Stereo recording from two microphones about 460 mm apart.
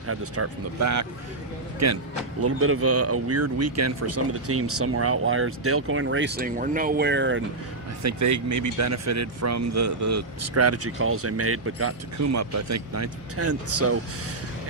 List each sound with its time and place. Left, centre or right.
0.1 s a man's voice: right
2.4 s speech: right
8.0 s a man's voice: right